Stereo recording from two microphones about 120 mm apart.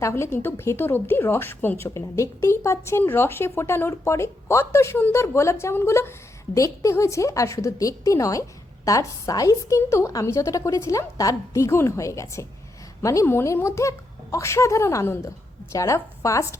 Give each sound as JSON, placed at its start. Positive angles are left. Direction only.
{"t": 0.0, "sound": "a woman's voice", "side_deg": 20}